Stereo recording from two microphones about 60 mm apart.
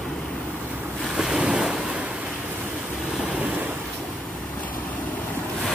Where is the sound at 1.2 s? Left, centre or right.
Centre.